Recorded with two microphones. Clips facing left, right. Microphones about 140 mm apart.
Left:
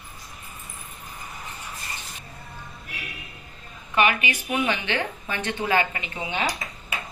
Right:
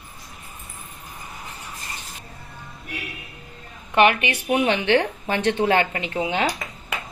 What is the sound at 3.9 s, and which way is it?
A woman's voice, 60° right (ahead or behind).